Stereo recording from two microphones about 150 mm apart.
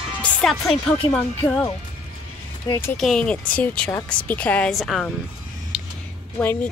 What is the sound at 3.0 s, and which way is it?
Speech, 5° left (ahead or behind).